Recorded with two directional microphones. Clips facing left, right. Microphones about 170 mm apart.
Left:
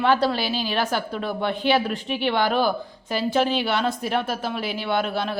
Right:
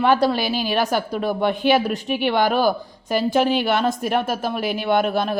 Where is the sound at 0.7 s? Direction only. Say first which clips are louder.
Right 5 dB; 45° right (ahead or behind).